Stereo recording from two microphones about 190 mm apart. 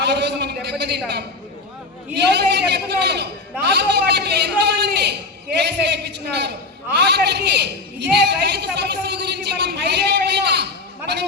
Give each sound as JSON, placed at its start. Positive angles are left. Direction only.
{"t": 0.0, "sound": "a man's voice", "side_deg": -60}